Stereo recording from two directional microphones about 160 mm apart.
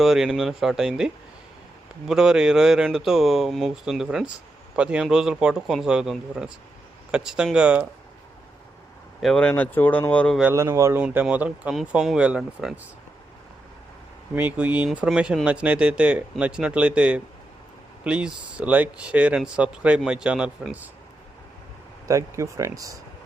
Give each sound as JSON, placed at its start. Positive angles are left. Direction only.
{"t": 0.0, "sound": "speech", "side_deg": 0}
{"t": 9.2, "sound": "speech", "side_deg": 5}
{"t": 10.5, "sound": "speech", "side_deg": -20}
{"t": 14.3, "sound": "speech", "side_deg": -10}
{"t": 22.0, "sound": "speech", "side_deg": -20}